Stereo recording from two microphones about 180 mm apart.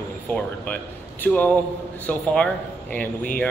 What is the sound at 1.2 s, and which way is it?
A man's voice, 10° left (ahead or behind).